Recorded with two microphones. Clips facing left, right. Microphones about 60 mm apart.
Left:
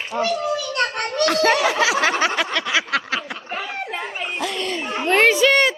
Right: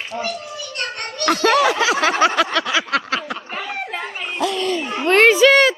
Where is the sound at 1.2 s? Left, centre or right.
Right.